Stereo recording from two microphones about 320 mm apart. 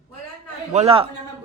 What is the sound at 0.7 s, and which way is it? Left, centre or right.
Speech, centre.